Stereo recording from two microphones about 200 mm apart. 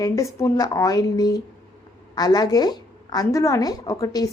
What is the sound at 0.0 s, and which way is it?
Speech, 20° left (ahead or behind).